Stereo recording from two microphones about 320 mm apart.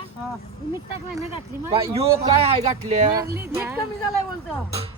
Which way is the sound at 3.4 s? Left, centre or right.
Centre.